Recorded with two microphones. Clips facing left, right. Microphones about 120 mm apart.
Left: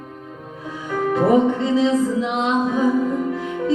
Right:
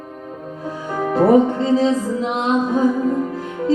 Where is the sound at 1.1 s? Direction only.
40° right (ahead or behind).